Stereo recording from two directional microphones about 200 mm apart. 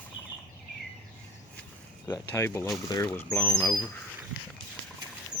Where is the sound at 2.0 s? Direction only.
15° left (ahead or behind).